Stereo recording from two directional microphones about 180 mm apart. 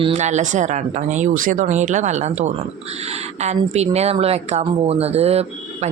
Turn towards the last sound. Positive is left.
turn(degrees=-35)  # may be behind; listen again after turning